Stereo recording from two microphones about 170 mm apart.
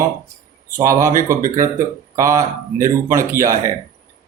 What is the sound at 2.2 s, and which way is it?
Speech, 15° right (ahead or behind).